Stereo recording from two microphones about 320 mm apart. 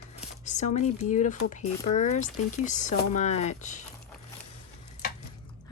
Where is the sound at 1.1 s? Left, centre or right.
Left.